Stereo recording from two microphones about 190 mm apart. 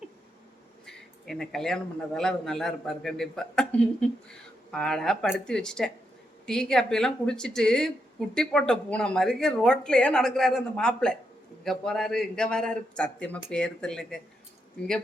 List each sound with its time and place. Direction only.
0.9 s a man's voice: centre (ahead or behind)